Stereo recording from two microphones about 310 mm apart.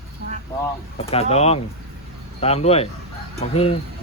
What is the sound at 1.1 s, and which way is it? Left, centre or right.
Speech, centre.